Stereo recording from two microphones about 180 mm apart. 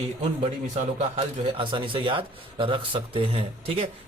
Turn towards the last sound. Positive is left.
turn(degrees=-30)  # may be behind; listen again after turning